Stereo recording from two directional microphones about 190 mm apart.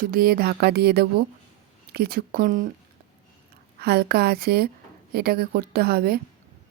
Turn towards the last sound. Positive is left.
turn(degrees=-55)  # may be behind; listen again after turning